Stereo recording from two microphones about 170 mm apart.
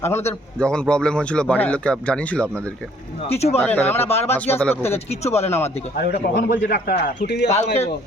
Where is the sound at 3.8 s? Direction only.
10° left (ahead or behind).